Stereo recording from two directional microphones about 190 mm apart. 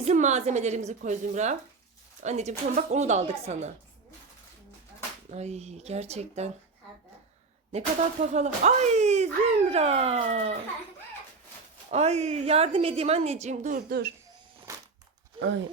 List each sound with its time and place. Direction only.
0.0 s speech: 40° right (ahead or behind)
5.3 s speech: 35° right (ahead or behind)
8.3 s speech: 35° right (ahead or behind)
11.9 s speech: 35° right (ahead or behind)
14.7 s a sound: 15° right (ahead or behind)
15.4 s speech: 70° right (ahead or behind)